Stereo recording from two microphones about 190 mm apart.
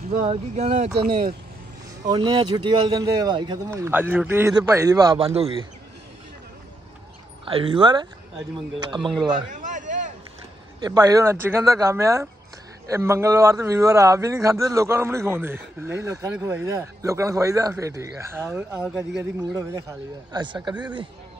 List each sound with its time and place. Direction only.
0.3 s speech: 35° right (ahead or behind)
2.0 s speech: 20° right (ahead or behind)
5.3 s speech: 30° right (ahead or behind)
7.4 s speech: 30° right (ahead or behind)
9.5 s a sound: 40° right (ahead or behind)
10.8 s speech: 20° right (ahead or behind)